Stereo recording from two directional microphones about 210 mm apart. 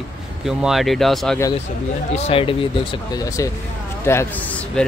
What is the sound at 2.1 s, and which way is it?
Speech, 30° left (ahead or behind).